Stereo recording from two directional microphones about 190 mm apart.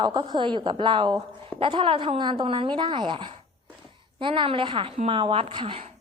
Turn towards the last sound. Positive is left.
turn(degrees=-25)  # may be behind; listen again after turning